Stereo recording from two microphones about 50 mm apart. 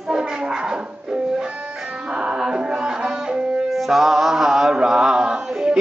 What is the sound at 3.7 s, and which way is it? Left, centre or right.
Chant, centre.